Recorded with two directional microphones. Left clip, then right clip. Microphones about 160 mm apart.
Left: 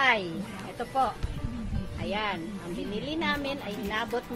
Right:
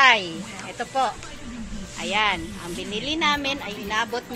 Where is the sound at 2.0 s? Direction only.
20° right (ahead or behind).